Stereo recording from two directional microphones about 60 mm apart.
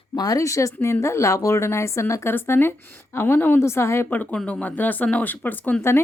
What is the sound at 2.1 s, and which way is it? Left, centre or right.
A woman's voice, left.